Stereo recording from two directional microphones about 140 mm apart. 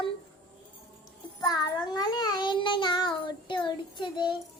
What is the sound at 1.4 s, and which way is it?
Child singing, 30° left (ahead or behind).